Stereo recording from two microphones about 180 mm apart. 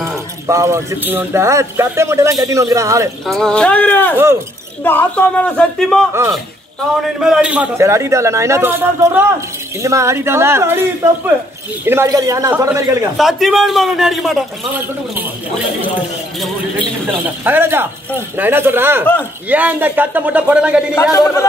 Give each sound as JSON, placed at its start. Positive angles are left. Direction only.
{"t": 0.5, "sound": "a man's voice", "side_deg": -15}
{"t": 3.3, "sound": "speech", "side_deg": 5}
{"t": 7.2, "sound": "a man's voice", "side_deg": -5}
{"t": 11.8, "sound": "a man's voice", "side_deg": -15}
{"t": 13.2, "sound": "a man's voice", "side_deg": 0}
{"t": 16.3, "sound": "a man's voice", "side_deg": -10}
{"t": 20.9, "sound": "speech", "side_deg": 15}